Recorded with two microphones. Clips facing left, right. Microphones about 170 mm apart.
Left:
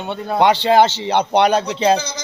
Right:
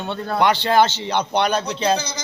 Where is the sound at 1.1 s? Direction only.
30° left (ahead or behind).